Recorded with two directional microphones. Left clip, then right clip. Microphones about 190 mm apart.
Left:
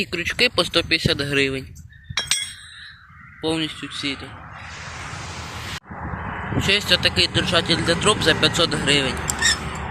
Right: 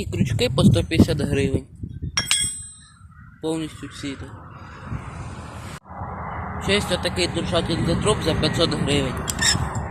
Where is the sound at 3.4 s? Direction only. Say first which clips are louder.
Left 3 dB; 10° right (ahead or behind).